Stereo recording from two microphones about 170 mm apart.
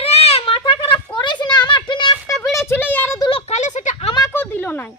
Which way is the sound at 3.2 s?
30° left (ahead or behind).